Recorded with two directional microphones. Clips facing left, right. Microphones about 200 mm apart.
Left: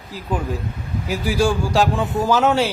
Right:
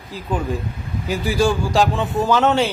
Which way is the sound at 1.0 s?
10° left (ahead or behind).